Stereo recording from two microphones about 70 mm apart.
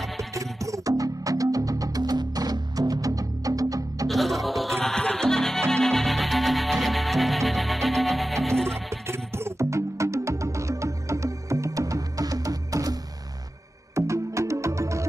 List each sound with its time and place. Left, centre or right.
0.3 s music: right
4.1 s music: centre
9.0 s music: right
13.9 s music: right